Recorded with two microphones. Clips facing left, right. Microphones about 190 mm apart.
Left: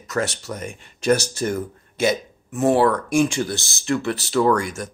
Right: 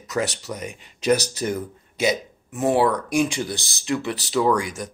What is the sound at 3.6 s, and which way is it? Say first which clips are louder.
Speech: left 2 dB; 45° left (ahead or behind).